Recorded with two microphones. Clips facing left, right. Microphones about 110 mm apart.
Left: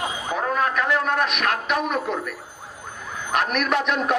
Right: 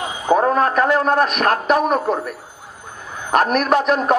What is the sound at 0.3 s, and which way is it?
A man's voice, 40° right (ahead or behind).